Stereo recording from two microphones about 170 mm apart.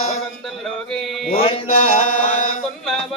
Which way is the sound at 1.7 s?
45° left (ahead or behind).